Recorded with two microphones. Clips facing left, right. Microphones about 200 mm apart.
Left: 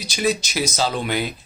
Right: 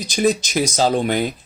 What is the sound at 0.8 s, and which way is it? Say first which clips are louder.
Speech: right 6 dB; 45° right (ahead or behind).